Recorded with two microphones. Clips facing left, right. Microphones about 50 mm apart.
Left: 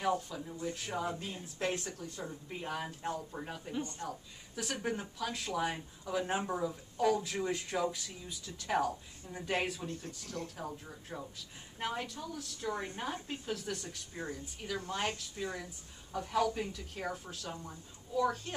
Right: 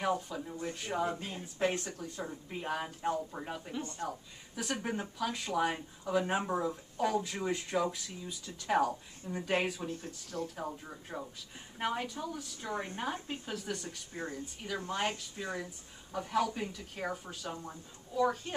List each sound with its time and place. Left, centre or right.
0.0 s speech: centre
1.0 s speech: right
1.8 s speech: centre